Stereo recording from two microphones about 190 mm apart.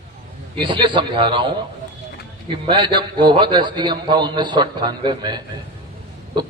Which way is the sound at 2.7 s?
25° right (ahead or behind).